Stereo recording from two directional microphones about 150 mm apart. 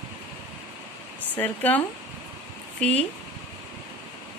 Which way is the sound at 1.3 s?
10° left (ahead or behind).